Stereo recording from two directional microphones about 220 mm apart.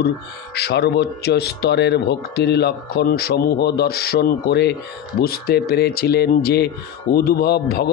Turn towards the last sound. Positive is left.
turn(degrees=45)  # may be behind; listen again after turning